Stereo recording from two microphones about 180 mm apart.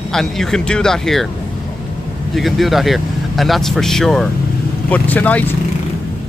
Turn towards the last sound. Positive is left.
turn(degrees=10)  # may be behind; listen again after turning